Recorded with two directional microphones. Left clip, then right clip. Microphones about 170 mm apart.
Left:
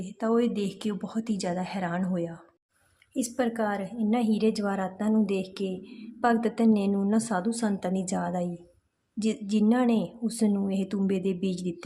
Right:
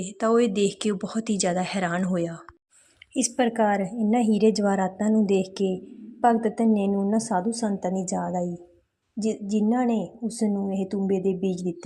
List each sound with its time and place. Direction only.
0.0 s a woman's voice: 15° right (ahead or behind)